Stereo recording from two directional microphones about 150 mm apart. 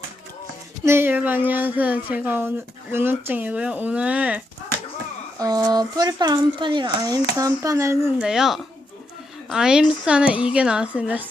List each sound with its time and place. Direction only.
0.9 s speech: 15° right (ahead or behind)
5.4 s speech: 25° right (ahead or behind)
8.2 s a woman's voice: 5° right (ahead or behind)